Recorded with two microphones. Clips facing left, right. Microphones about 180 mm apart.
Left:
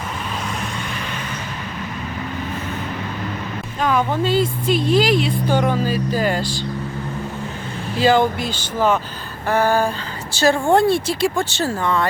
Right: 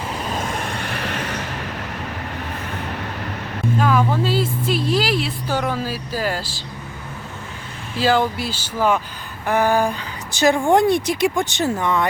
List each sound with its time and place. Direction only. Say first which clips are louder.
0.9 s a sound: right 2 dB; 70° right (ahead or behind)
3.8 s speech: even; 5° right (ahead or behind)
7.9 s speech: left 2 dB; centre (ahead or behind); by 12.0 s 20° right (ahead or behind)